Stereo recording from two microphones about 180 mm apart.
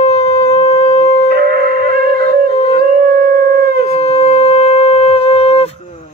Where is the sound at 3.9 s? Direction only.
35° left (ahead or behind).